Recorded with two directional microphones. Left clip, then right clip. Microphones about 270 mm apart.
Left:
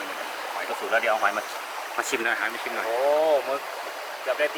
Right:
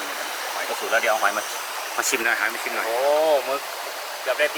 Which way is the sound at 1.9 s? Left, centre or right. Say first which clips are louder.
Right 3 dB; centre.